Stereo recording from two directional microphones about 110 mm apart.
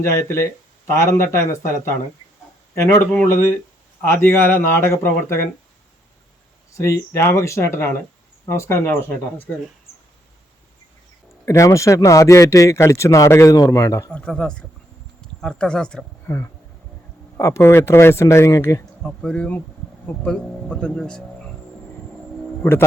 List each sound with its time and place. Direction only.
0.0 s speech: 25° left (ahead or behind)
4.0 s speech: 20° left (ahead or behind)
6.7 s speech: 25° left (ahead or behind)
11.4 s speech: 30° left (ahead or behind)
14.1 s speech: 10° left (ahead or behind)
16.2 s speech: 20° left (ahead or behind)
19.0 s speech: 5° left (ahead or behind)
22.6 s speech: 25° left (ahead or behind)